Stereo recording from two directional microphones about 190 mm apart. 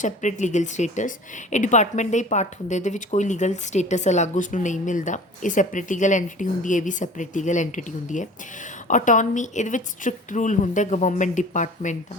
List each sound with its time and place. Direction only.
0.0 s speech: 40° left (ahead or behind)